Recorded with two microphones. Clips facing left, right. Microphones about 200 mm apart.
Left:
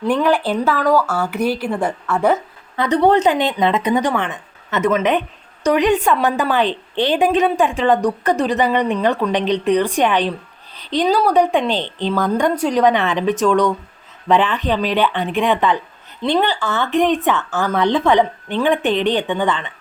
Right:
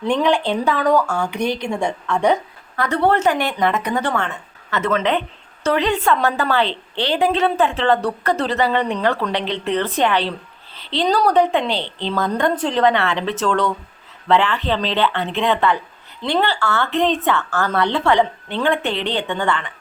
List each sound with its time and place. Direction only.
0.1 s speech: 5° left (ahead or behind)
2.7 s a woman's voice: 20° left (ahead or behind)